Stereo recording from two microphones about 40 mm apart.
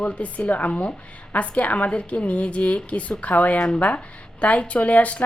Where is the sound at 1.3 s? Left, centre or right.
Left.